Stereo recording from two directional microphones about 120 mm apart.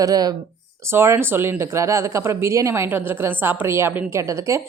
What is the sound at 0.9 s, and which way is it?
Speech, 20° right (ahead or behind).